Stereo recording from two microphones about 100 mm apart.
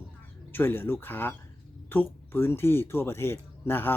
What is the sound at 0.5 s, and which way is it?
Speech, 20° left (ahead or behind).